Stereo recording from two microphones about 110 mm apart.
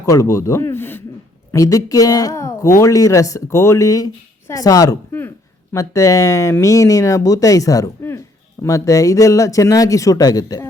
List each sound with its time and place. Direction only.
0.0 s a woman's voice: 30° left (ahead or behind)
1.5 s a woman's voice: 30° left (ahead or behind)